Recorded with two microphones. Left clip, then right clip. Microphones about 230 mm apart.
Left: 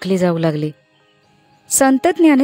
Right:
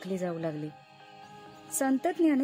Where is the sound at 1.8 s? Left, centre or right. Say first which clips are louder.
Left 15 dB; left.